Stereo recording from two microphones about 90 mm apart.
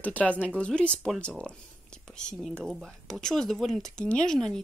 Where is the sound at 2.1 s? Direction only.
10° left (ahead or behind).